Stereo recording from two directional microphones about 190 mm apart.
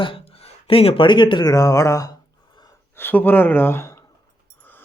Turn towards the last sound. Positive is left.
turn(degrees=10)  # may be behind; listen again after turning